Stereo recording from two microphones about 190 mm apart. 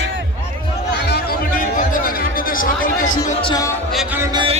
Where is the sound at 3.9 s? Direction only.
Centre (ahead or behind).